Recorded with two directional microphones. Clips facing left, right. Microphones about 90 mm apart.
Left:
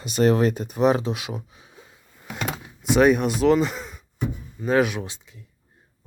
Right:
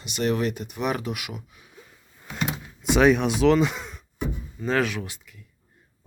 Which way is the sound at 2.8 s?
Centre (ahead or behind).